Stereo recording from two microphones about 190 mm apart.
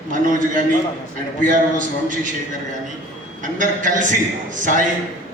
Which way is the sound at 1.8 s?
45° right (ahead or behind).